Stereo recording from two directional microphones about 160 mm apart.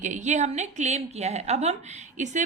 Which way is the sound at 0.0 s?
50° right (ahead or behind).